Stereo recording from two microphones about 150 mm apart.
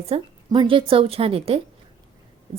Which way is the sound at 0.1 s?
35° right (ahead or behind).